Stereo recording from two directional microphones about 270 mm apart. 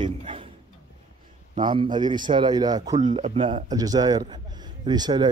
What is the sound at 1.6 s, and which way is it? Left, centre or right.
A man's voice, centre.